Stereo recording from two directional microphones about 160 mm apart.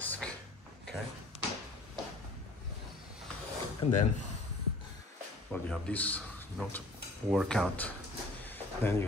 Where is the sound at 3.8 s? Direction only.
35° left (ahead or behind).